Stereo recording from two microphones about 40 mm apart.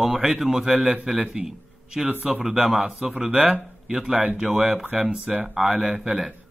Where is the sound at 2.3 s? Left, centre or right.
Centre.